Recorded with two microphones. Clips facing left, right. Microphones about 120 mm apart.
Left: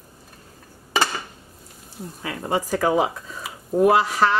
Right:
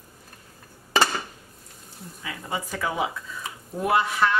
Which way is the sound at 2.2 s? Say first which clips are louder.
Left 7 dB; 50° left (ahead or behind).